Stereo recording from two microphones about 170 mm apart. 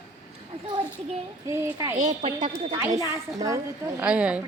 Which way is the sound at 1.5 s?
15° right (ahead or behind).